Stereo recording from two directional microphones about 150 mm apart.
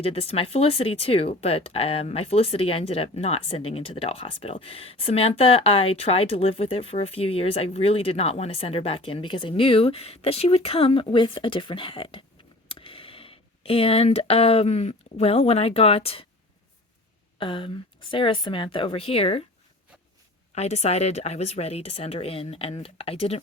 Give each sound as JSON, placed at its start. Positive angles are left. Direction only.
{"t": 0.0, "sound": "speech", "side_deg": 40}
{"t": 17.3, "sound": "speech", "side_deg": 35}
{"t": 20.6, "sound": "speech", "side_deg": 45}